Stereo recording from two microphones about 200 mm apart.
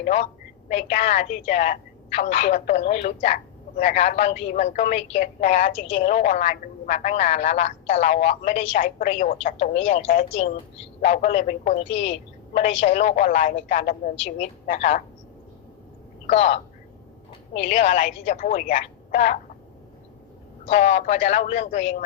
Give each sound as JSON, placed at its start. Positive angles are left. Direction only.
{"t": 0.0, "sound": "speech", "side_deg": 35}
{"t": 9.6, "sound": "speech", "side_deg": 30}
{"t": 16.2, "sound": "speech", "side_deg": 30}
{"t": 20.7, "sound": "speech", "side_deg": 35}